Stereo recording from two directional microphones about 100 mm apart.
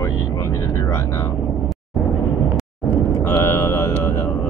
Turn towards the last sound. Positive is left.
turn(degrees=25)  # may be behind; listen again after turning